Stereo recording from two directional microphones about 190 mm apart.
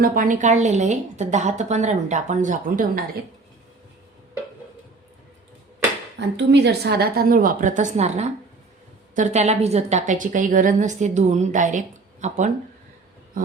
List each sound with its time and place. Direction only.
0.0 s a woman's voice: 45° right (ahead or behind)
6.1 s a woman's voice: 65° right (ahead or behind); by 12.5 s 40° right (ahead or behind)